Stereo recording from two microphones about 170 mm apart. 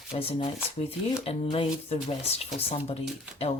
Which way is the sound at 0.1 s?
35° left (ahead or behind).